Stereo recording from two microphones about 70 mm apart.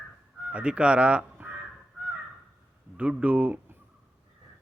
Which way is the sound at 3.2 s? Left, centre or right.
Centre.